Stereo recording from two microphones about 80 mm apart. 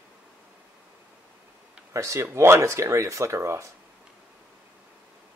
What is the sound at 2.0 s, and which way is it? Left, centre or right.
Speech, right.